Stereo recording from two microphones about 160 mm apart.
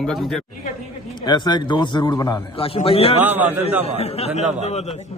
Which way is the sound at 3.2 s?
10° right (ahead or behind).